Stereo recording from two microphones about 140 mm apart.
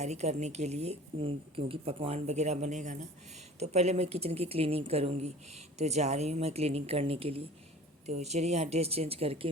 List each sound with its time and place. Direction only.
0.0 s a woman's voice: 55° right (ahead or behind)